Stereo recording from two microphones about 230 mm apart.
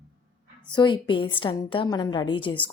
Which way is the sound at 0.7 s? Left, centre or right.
Centre.